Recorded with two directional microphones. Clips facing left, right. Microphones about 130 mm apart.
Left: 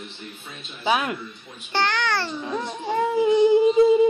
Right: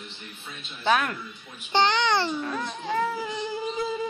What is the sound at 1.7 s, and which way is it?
Speech, 20° right (ahead or behind).